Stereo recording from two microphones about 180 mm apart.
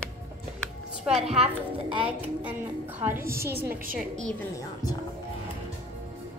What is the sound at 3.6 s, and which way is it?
Speech, 50° right (ahead or behind).